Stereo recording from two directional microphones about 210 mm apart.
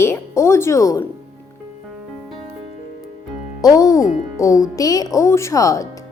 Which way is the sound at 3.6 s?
15° left (ahead or behind).